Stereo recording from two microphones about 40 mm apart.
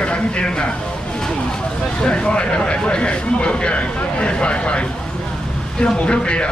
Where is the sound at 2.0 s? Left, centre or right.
Left.